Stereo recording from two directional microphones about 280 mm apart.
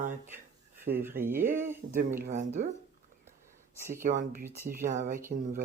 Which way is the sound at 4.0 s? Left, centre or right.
Right.